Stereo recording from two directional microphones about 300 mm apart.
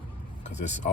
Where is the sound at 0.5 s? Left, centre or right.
Left.